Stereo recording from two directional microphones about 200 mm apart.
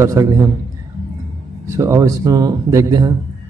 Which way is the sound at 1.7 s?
15° right (ahead or behind).